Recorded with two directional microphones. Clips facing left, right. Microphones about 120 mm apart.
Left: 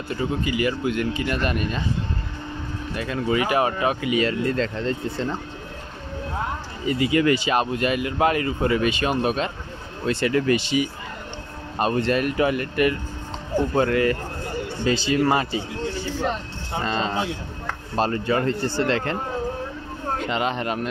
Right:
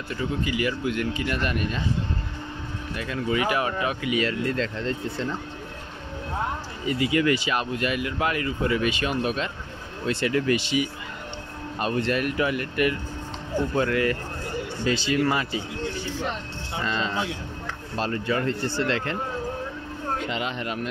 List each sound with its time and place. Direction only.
0.5 s speech: 25° left (ahead or behind)
3.0 s speech: 35° left (ahead or behind)
4.6 s speech: 45° left (ahead or behind)
7.0 s speech: 30° left (ahead or behind)
10.0 s speech: 45° left (ahead or behind)
16.7 s speech: 35° left (ahead or behind)
20.2 s speech: 40° left (ahead or behind)